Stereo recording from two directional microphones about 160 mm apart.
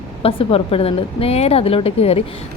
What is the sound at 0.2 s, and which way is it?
A woman's voice, 35° left (ahead or behind).